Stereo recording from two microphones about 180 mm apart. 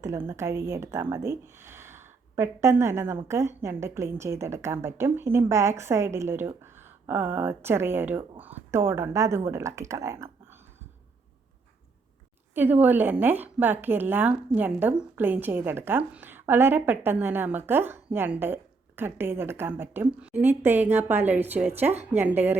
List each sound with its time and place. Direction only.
0.0 s a woman's voice: 15° right (ahead or behind)
12.5 s a woman's voice: 10° right (ahead or behind)